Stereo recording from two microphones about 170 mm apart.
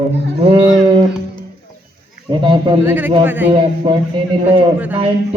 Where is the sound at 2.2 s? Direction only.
30° right (ahead or behind).